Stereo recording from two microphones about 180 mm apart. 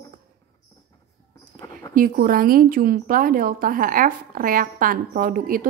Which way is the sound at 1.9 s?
50° right (ahead or behind).